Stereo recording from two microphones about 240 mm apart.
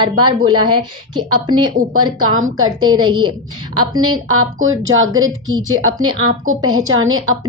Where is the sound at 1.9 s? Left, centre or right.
Right.